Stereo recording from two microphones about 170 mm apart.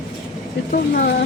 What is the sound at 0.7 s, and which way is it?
Speech, 55° left (ahead or behind).